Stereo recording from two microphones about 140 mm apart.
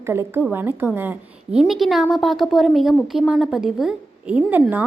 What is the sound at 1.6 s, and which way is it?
A woman's voice, centre (ahead or behind).